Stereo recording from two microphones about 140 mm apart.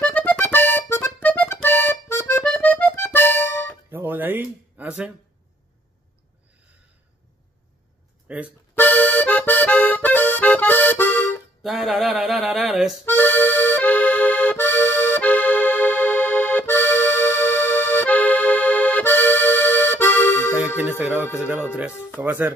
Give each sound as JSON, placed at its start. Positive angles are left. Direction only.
{"t": 0.0, "sound": "accordion", "side_deg": 10}
{"t": 3.9, "sound": "music", "side_deg": -15}
{"t": 8.3, "sound": "speech", "side_deg": -10}
{"t": 8.7, "sound": "accordion", "side_deg": 15}
{"t": 11.6, "sound": "speech", "side_deg": 0}
{"t": 13.0, "sound": "accordion", "side_deg": 15}
{"t": 22.2, "sound": "speech", "side_deg": -15}